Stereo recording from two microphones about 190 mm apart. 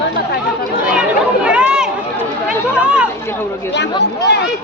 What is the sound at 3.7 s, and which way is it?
Chatter, 65° left (ahead or behind).